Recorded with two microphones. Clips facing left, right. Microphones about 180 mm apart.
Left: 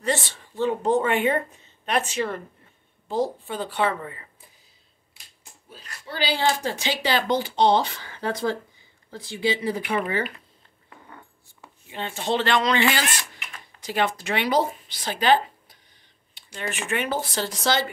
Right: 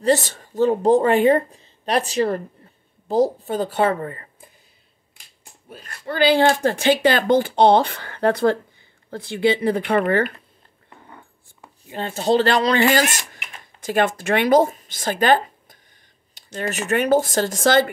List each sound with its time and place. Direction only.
0.0 s a woman's voice: 40° right (ahead or behind)
5.7 s speech: 55° right (ahead or behind)
11.9 s speech: 40° right (ahead or behind)